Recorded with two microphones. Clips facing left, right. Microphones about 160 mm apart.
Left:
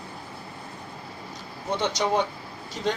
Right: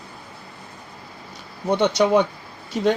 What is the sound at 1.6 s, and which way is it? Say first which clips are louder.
Speech: right 7 dB; 65° right (ahead or behind).